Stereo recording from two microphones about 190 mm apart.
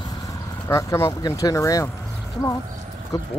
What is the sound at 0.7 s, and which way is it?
Speech, 15° left (ahead or behind).